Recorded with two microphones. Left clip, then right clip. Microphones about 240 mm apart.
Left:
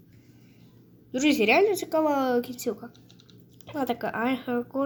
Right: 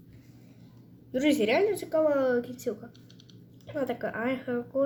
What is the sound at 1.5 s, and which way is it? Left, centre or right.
A woman's voice, left.